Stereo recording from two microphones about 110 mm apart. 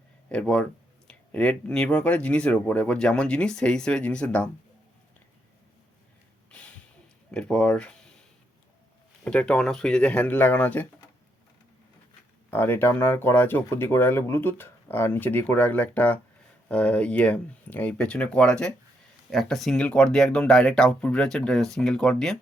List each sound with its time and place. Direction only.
0.3 s speech: 10° left (ahead or behind)
7.3 s speech: 10° left (ahead or behind)
9.2 s speech: 10° left (ahead or behind)
12.5 s speech: 20° left (ahead or behind)